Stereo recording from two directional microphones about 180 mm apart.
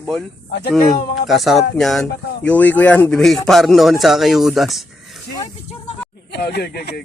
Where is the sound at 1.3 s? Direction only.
Centre (ahead or behind).